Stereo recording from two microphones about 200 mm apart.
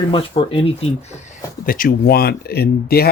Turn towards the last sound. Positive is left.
turn(degrees=50)  # may be behind; listen again after turning